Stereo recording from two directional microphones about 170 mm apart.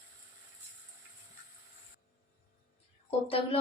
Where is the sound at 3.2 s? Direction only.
35° left (ahead or behind).